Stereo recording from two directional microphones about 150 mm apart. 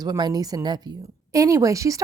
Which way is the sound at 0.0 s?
25° right (ahead or behind).